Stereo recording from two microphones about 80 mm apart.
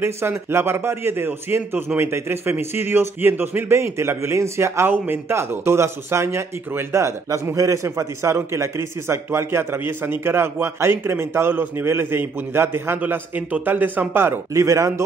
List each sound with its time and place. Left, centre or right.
0.0 s speech: right